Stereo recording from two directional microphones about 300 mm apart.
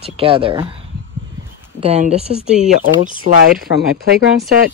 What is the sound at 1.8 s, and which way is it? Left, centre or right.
Speech, right.